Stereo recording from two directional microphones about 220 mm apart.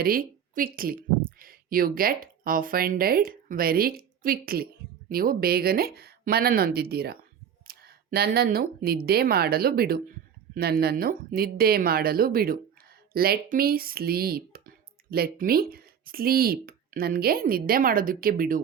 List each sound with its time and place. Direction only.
0.0 s speech: 40° right (ahead or behind)